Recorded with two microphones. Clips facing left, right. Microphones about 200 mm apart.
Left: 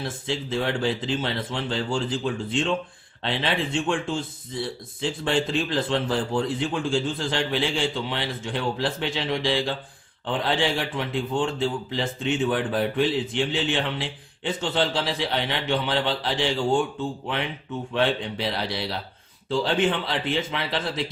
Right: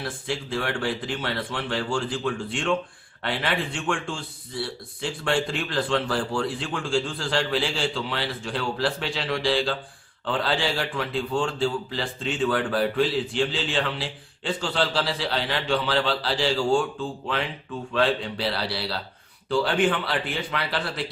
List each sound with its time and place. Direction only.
0.0 s a man's voice: 20° left (ahead or behind)